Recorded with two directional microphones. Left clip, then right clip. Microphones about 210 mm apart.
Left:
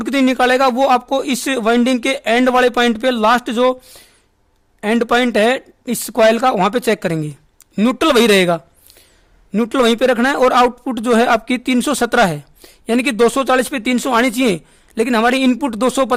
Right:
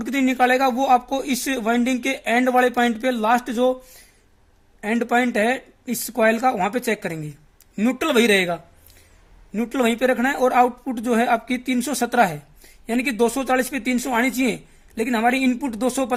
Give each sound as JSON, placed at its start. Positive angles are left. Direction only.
{"t": 0.0, "sound": "a woman's voice", "side_deg": 50}